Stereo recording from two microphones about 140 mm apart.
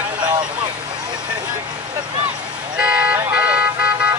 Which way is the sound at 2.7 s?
10° right (ahead or behind).